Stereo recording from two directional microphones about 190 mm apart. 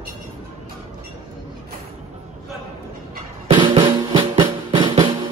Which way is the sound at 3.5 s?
25° right (ahead or behind).